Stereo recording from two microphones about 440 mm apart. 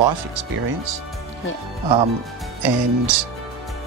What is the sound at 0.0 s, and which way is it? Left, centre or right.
Speech, right.